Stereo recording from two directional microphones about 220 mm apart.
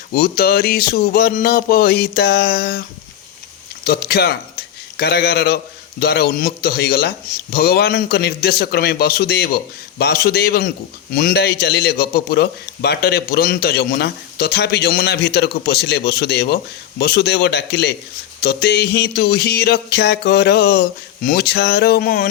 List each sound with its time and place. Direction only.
0.1 s a man's voice: 45° left (ahead or behind)
3.8 s a man's voice: 45° left (ahead or behind)